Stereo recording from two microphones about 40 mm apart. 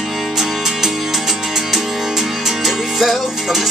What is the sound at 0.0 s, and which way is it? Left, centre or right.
Music, centre.